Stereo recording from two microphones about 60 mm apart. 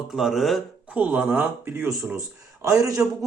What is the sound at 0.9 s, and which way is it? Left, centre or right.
Speech, right.